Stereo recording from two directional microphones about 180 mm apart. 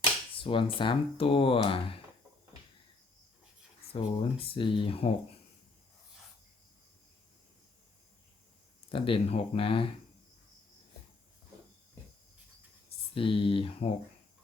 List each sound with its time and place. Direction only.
0.3 s speech: 30° left (ahead or behind)
3.9 s speech: 30° left (ahead or behind)
8.9 s speech: 30° left (ahead or behind)
13.1 s speech: 30° left (ahead or behind)